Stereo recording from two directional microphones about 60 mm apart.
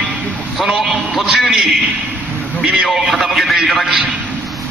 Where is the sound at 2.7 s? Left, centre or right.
Centre.